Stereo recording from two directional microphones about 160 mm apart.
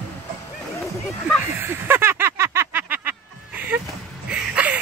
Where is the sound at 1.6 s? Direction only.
15° right (ahead or behind).